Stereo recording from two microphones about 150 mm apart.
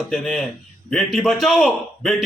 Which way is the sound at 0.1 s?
5° left (ahead or behind).